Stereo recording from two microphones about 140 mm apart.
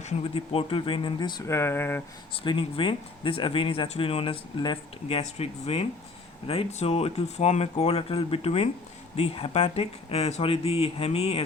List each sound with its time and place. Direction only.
0.0 s speech: 40° left (ahead or behind)
1.5 s speech: 20° left (ahead or behind)
2.3 s speech: 35° left (ahead or behind)